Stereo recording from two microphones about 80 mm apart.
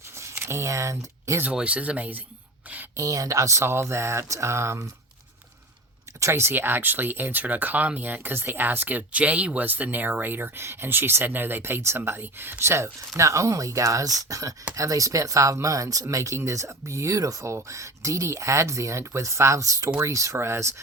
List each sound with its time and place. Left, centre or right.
0.4 s speech: right
1.5 s speech: centre
2.9 s speech: right
6.1 s speech: right